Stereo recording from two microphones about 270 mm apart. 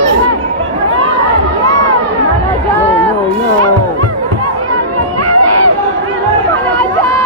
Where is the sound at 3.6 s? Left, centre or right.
Right.